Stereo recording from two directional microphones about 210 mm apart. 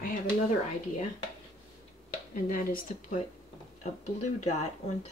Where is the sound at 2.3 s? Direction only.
40° left (ahead or behind).